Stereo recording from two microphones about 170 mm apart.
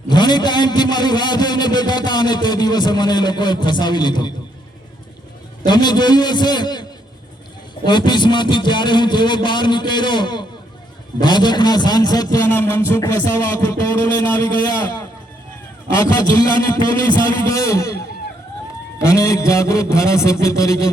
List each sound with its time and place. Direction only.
0.1 s a man's voice: 25° left (ahead or behind)
5.6 s a man's voice: 25° left (ahead or behind)
7.9 s a man's voice: 25° left (ahead or behind)
16.0 s a man's voice: 20° left (ahead or behind)